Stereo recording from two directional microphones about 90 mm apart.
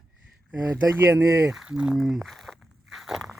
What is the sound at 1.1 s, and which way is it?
Speech, 35° right (ahead or behind).